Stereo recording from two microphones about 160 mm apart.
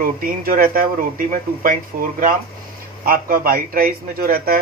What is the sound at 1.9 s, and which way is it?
A man's voice, 60° right (ahead or behind).